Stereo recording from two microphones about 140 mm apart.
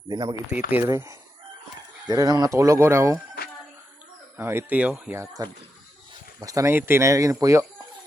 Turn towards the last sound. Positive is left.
turn(degrees=-25)  # may be behind; listen again after turning